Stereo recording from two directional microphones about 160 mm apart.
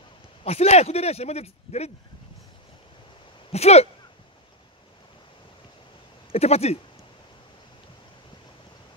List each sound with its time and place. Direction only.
0.4 s speech: 40° left (ahead or behind)
3.5 s speech: 40° left (ahead or behind)
6.3 s speech: 40° left (ahead or behind)